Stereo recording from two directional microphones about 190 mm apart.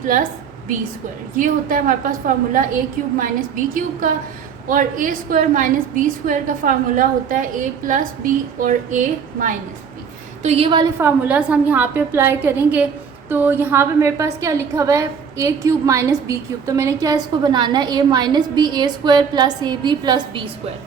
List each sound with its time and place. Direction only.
1.4 s a woman's voice: 45° right (ahead or behind)
4.7 s a woman's voice: 45° right (ahead or behind)
10.4 s a woman's voice: 30° right (ahead or behind)
10.9 s a woman's voice: 10° right (ahead or behind)